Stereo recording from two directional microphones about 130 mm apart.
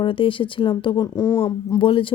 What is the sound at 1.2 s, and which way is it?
Speech, 20° left (ahead or behind).